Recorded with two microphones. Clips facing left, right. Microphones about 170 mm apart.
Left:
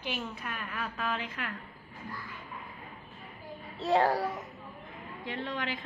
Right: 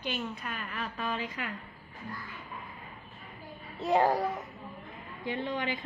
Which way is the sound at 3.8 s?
15° right (ahead or behind).